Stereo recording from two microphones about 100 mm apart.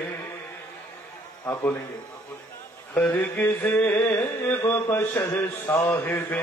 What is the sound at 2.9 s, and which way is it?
Mantra, 15° left (ahead or behind).